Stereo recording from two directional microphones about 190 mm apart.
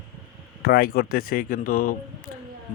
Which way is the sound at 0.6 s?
50° left (ahead or behind).